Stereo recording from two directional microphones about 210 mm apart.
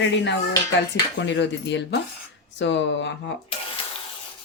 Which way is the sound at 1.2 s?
55° left (ahead or behind).